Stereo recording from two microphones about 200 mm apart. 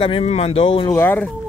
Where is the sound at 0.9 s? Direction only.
10° left (ahead or behind).